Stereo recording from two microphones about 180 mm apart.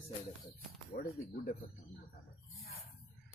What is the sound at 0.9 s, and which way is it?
Speech, 55° left (ahead or behind).